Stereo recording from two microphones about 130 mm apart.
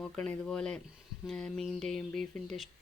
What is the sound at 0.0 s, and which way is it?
Speech, 5° left (ahead or behind).